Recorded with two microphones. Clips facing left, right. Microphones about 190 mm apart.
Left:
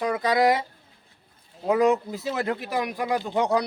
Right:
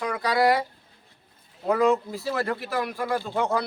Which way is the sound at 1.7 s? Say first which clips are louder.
Left 1 dB; 20° left (ahead or behind).